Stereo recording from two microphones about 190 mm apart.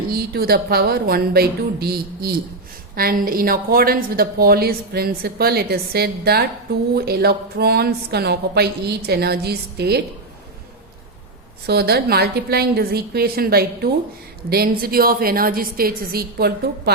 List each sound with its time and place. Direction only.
0.1 s a woman's voice: 55° right (ahead or behind)
11.6 s a woman's voice: 55° right (ahead or behind)